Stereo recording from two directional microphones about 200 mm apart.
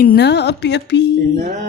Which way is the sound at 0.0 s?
50° left (ahead or behind).